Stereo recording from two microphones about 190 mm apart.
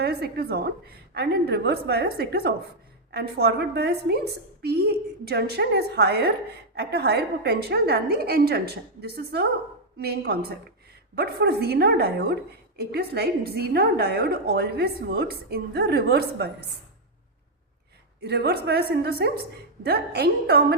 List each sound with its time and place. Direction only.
0.0 s a woman's voice: 55° right (ahead or behind)
18.2 s a woman's voice: 60° right (ahead or behind)